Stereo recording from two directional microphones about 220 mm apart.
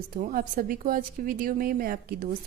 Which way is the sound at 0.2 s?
40° right (ahead or behind).